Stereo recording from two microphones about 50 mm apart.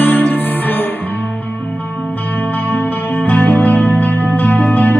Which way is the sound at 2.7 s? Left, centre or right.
Left.